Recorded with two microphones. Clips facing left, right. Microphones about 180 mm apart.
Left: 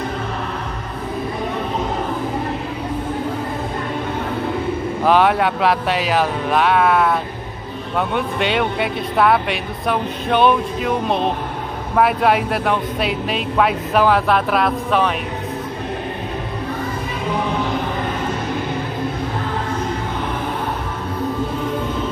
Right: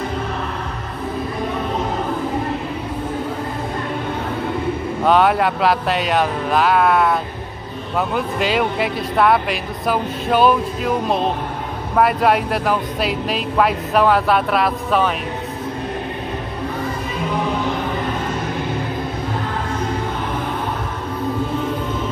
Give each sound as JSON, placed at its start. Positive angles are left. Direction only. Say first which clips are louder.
{"t": 5.0, "sound": "speech", "louder": "even", "side_deg": 0}